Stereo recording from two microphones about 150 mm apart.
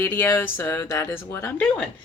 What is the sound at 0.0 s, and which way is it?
A woman's voice, 15° left (ahead or behind).